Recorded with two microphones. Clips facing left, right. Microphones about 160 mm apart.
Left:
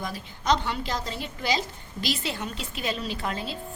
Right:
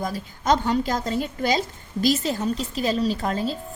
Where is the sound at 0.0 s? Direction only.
45° right (ahead or behind).